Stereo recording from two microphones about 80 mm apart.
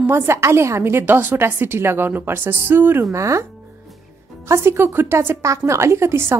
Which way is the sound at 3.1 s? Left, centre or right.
Right.